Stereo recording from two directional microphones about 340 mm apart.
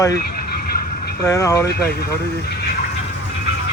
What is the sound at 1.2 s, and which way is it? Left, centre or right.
Speech, centre.